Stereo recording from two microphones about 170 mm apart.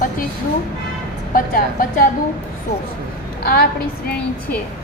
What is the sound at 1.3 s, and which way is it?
Speech, 55° left (ahead or behind).